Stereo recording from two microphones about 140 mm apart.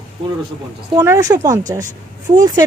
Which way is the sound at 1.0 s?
20° right (ahead or behind).